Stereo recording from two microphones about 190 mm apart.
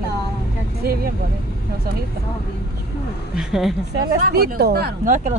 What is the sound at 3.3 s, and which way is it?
Speech, centre (ahead or behind).